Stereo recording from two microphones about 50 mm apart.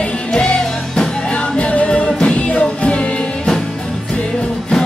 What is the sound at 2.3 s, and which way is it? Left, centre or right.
Music, left.